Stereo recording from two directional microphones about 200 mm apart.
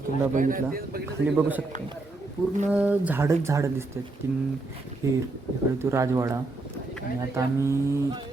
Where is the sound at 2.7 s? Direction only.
5° right (ahead or behind).